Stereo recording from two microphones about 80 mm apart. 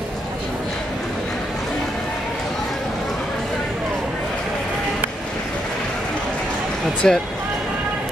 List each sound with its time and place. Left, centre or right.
7.0 s speech: centre